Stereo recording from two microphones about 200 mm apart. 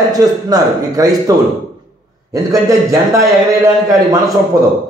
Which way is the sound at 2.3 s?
15° right (ahead or behind).